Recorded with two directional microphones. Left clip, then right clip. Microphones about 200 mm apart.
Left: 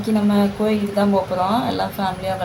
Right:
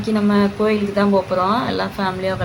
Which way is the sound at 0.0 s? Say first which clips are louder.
Right 1 dB; 5° right (ahead or behind).